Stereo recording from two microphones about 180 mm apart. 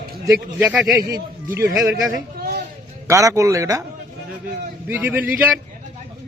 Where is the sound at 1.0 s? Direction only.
20° right (ahead or behind).